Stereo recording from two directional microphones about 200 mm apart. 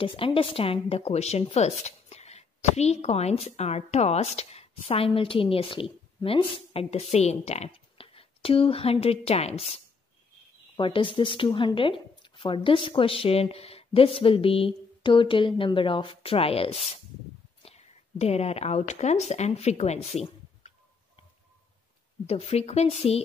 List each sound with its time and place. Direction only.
0.0 s a woman's voice: 25° left (ahead or behind)
10.8 s speech: 25° left (ahead or behind)
20.2 s a sound: 35° left (ahead or behind)
22.2 s a woman's voice: 30° left (ahead or behind)